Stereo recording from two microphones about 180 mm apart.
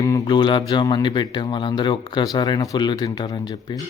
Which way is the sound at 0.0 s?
20° left (ahead or behind).